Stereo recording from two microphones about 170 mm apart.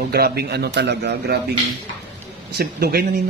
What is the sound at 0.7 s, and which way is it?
Speech, 80° right.